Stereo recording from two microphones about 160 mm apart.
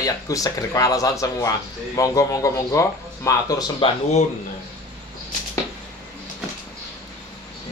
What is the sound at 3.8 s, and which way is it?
Speech, 35° left (ahead or behind).